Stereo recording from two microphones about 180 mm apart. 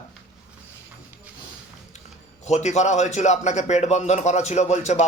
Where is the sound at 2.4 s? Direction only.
40° left (ahead or behind).